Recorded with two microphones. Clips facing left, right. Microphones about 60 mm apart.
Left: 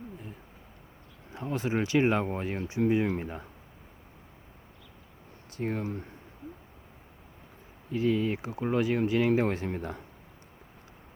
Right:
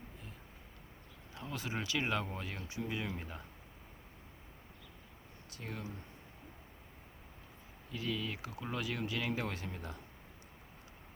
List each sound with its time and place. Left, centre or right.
1.3 s speech: left
5.5 s speech: left
5.8 s speech: left
7.9 s speech: left
9.6 s speech: left